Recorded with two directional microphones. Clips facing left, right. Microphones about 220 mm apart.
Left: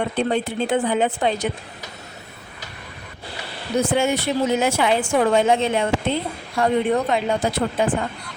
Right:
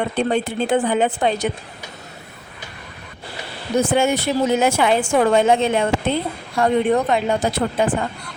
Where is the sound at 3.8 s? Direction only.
50° right (ahead or behind).